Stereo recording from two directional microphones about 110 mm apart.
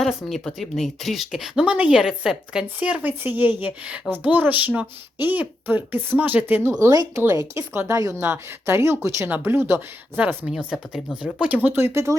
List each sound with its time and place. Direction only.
0.0 s speech: centre (ahead or behind); by 6.6 s 15° right (ahead or behind)
6.7 s speech: 25° right (ahead or behind)
10.4 s speech: 5° right (ahead or behind); by 12.1 s 25° right (ahead or behind)